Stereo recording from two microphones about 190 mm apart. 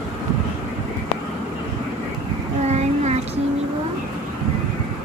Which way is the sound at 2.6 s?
35° right (ahead or behind).